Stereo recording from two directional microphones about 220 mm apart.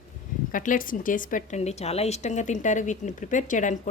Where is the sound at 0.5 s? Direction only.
35° left (ahead or behind).